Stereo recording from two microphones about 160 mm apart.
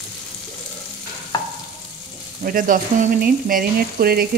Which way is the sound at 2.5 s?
60° right (ahead or behind).